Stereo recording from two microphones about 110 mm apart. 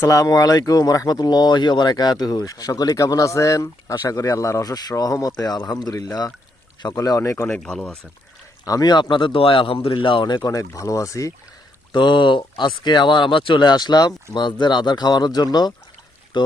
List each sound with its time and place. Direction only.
0.0 s speech: 30° left (ahead or behind)
7.5 s speech: 5° left (ahead or behind)
8.6 s speech: 35° left (ahead or behind)
11.9 s speech: 45° left (ahead or behind)